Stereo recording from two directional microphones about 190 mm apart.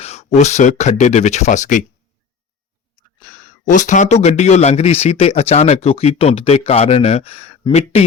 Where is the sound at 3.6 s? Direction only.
40° left (ahead or behind).